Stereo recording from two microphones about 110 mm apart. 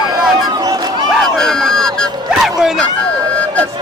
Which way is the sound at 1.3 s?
5° left (ahead or behind).